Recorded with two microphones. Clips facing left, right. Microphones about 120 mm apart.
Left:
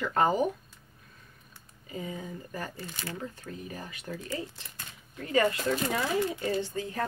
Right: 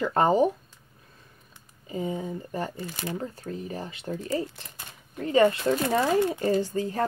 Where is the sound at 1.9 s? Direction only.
30° right (ahead or behind).